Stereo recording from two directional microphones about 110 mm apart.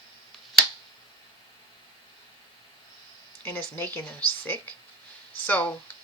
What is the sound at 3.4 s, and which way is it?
Speech, 15° left (ahead or behind).